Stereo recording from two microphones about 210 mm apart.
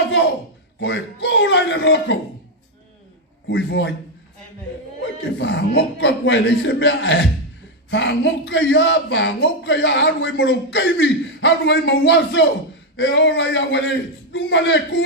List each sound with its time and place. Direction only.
0.8 s speech: 55° left (ahead or behind)
3.5 s a man's voice: 55° left (ahead or behind)
5.4 s speech: 55° left (ahead or behind)